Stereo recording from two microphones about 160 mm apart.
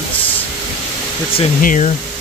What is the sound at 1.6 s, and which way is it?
Speech, 50° left (ahead or behind).